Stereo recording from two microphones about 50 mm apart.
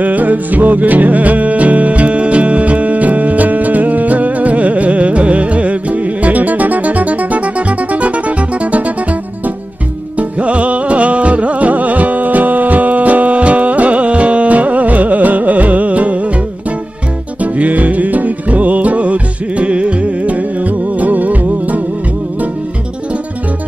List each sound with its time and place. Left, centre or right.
0.0 s music: right
10.1 s music: right
17.4 s music: right